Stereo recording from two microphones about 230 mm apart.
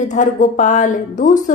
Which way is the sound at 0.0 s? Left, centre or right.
Left.